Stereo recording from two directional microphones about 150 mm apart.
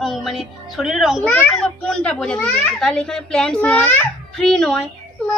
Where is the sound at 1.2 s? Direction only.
10° left (ahead or behind).